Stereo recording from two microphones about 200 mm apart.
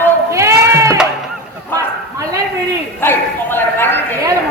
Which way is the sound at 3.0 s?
10° left (ahead or behind).